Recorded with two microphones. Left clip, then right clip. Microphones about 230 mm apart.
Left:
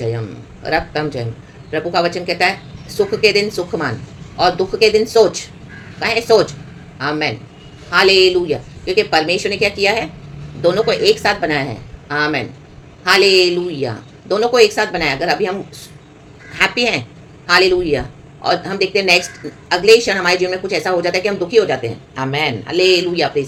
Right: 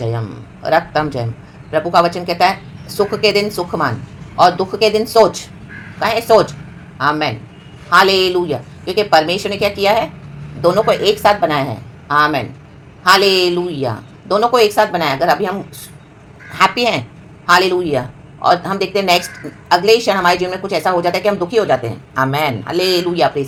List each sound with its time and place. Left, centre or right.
0.6 s a woman's voice: centre
16.6 s a woman's voice: centre